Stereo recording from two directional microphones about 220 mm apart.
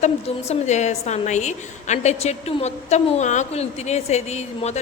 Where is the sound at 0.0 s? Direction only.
30° left (ahead or behind).